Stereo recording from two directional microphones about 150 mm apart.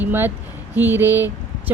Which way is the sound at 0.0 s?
15° right (ahead or behind).